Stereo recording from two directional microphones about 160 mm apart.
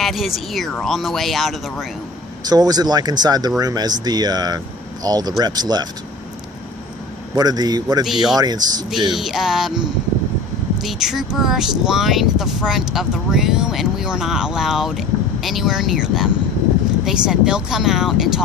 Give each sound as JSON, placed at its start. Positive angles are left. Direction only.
{"t": 0.0, "sound": "speech", "side_deg": 0}
{"t": 2.5, "sound": "speech", "side_deg": -25}
{"t": 7.3, "sound": "speech", "side_deg": -25}
{"t": 8.0, "sound": "speech", "side_deg": 0}
{"t": 8.4, "sound": "speech", "side_deg": -25}
{"t": 9.1, "sound": "speech", "side_deg": 0}